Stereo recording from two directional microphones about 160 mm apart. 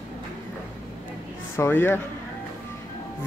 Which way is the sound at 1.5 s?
15° left (ahead or behind).